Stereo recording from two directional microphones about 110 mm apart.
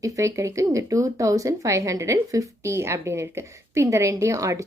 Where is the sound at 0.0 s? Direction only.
30° right (ahead or behind).